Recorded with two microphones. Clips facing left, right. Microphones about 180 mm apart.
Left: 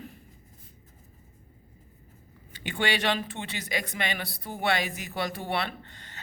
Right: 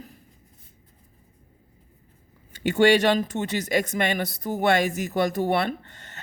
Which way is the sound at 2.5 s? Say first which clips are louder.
Right 11 dB; 45° right (ahead or behind).